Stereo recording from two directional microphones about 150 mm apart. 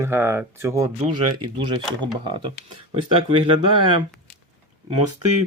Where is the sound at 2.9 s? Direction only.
35° right (ahead or behind).